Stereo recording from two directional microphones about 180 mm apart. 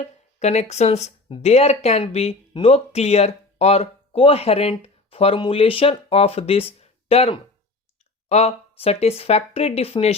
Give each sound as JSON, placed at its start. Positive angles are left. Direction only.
{"t": 0.0, "sound": "speech", "side_deg": 40}